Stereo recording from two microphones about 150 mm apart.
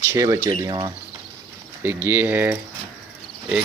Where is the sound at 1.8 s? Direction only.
15° right (ahead or behind).